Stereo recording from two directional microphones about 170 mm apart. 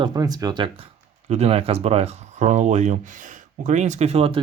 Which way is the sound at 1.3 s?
40° right (ahead or behind).